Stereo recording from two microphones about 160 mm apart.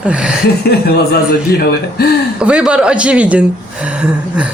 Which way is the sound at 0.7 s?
80° left.